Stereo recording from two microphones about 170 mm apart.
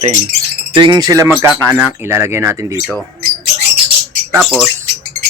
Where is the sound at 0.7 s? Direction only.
25° right (ahead or behind).